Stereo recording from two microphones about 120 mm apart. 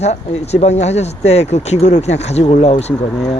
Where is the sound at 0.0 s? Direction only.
65° left (ahead or behind).